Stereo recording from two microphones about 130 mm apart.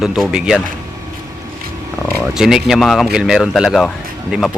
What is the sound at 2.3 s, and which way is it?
A man's voice, 5° right (ahead or behind).